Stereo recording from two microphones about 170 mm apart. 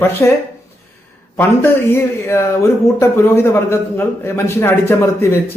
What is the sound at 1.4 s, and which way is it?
Speech, 15° left (ahead or behind).